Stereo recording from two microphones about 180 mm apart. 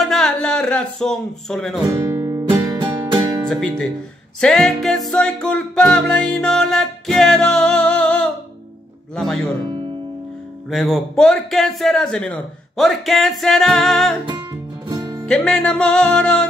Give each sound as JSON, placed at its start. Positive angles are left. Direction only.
{"t": 0.0, "sound": "speech", "side_deg": 0}
{"t": 1.9, "sound": "music", "side_deg": -20}
{"t": 3.4, "sound": "speech", "side_deg": 5}
{"t": 4.4, "sound": "music", "side_deg": 0}
{"t": 10.7, "sound": "music", "side_deg": 0}
{"t": 14.2, "sound": "music", "side_deg": -25}
{"t": 15.2, "sound": "music", "side_deg": 5}